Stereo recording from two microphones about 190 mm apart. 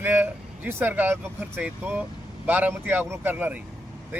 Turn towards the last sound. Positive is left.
turn(degrees=-10)  # may be behind; listen again after turning